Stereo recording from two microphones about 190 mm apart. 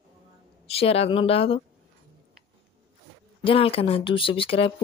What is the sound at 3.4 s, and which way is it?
Speech, 30° left (ahead or behind).